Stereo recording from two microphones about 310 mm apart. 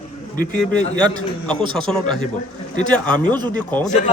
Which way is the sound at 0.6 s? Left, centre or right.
Centre.